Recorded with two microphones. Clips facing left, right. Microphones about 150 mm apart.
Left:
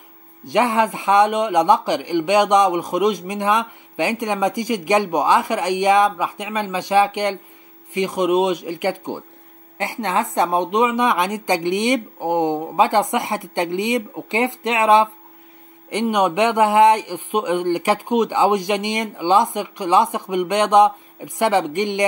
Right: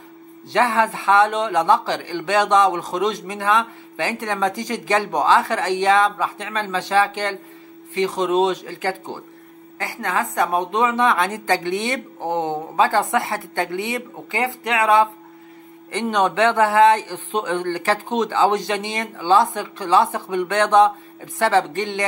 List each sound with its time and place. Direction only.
0.5 s a woman's voice: 15° left (ahead or behind)